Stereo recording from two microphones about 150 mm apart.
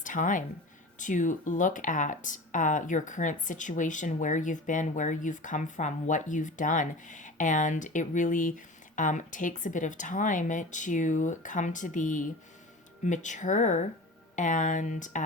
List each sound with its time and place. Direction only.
0.0 s speech: 60° left (ahead or behind)